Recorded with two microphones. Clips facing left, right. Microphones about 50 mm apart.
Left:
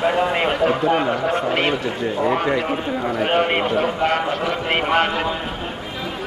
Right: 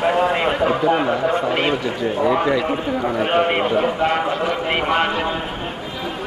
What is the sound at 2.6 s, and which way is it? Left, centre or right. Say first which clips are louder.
A man's voice: right 2 dB; centre.